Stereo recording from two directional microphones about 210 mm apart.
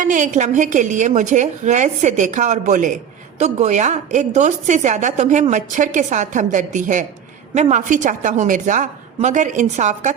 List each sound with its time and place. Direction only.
0.0 s a woman's voice: 35° right (ahead or behind)